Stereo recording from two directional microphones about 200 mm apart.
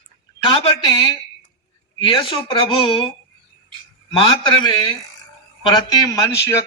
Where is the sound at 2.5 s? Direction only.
25° left (ahead or behind).